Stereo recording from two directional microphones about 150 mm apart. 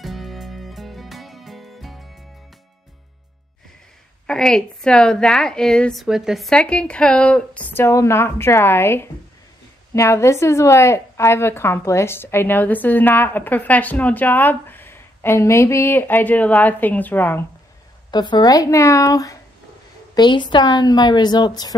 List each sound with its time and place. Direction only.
0.0 s music: centre (ahead or behind)
4.3 s a woman's voice: 5° left (ahead or behind)
18.1 s a woman's voice: 30° left (ahead or behind)